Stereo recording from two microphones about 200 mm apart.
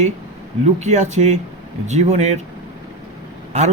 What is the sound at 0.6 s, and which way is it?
Speech, 35° right (ahead or behind).